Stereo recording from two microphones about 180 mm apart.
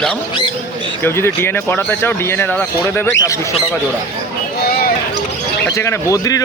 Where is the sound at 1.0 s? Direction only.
15° left (ahead or behind).